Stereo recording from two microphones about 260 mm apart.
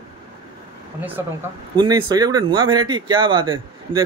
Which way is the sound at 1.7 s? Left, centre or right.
Centre.